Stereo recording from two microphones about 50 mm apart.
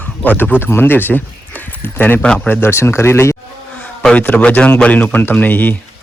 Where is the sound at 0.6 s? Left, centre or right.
Left.